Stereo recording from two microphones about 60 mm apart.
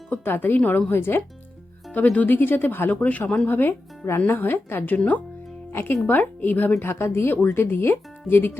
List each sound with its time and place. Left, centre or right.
0.1 s speech: left
1.9 s speech: left
4.9 s speech: left